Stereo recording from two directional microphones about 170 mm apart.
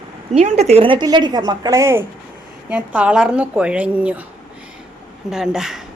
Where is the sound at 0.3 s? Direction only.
40° right (ahead or behind); by 4.2 s 10° right (ahead or behind).